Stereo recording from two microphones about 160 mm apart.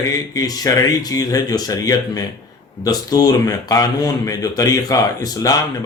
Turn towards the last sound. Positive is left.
turn(degrees=25)  # may be behind; listen again after turning